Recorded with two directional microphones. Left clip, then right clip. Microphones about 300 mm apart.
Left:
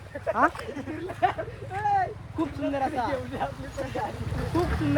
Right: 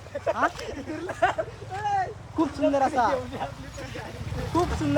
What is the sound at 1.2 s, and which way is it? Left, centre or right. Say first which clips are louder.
Speech: right 1 dB; right.